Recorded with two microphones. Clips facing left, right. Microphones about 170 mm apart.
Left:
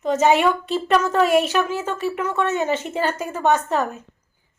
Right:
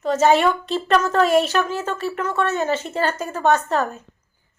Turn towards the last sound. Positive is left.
turn(degrees=10)  # may be behind; listen again after turning